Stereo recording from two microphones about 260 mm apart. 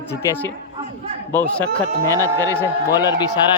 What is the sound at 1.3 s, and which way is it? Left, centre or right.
Speech, centre.